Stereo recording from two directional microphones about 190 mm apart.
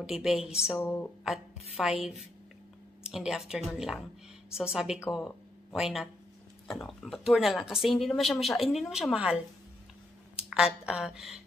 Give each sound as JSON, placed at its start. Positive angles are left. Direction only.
{"t": 0.0, "sound": "speech", "side_deg": -5}
{"t": 0.7, "sound": "speech", "side_deg": 10}
{"t": 1.2, "sound": "speech", "side_deg": 0}
{"t": 3.0, "sound": "speech", "side_deg": -5}